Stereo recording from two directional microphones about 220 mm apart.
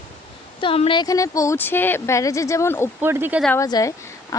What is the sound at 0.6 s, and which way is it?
Speech, 25° left (ahead or behind).